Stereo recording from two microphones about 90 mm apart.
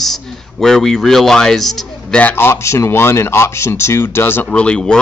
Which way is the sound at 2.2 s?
20° left (ahead or behind).